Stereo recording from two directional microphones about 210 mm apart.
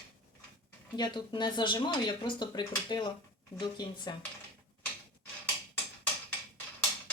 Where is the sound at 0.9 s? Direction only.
20° left (ahead or behind).